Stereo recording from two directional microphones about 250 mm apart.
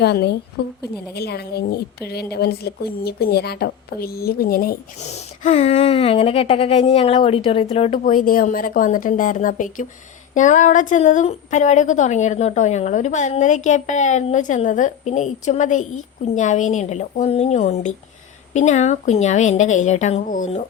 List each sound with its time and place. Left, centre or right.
0.0 s a woman's voice: left